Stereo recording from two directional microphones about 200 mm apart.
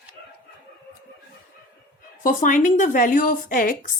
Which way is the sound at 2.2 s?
40° left (ahead or behind).